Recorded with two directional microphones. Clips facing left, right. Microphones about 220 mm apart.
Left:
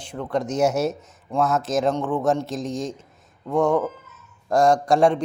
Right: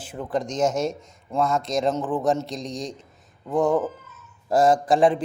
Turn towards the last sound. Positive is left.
turn(degrees=0)  # may be behind; listen again after turning